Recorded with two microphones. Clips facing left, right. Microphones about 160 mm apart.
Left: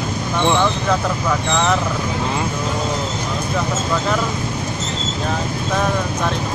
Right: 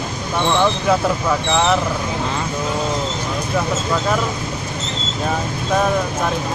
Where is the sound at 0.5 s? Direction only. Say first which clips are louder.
Right 2 dB; 10° right (ahead or behind).